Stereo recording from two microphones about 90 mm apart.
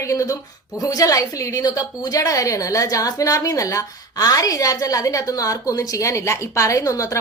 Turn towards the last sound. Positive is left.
turn(degrees=35)  # may be behind; listen again after turning